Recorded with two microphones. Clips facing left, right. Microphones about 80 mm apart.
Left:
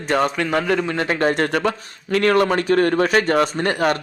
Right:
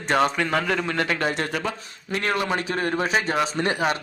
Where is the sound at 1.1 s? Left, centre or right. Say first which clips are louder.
Left 6 dB; left.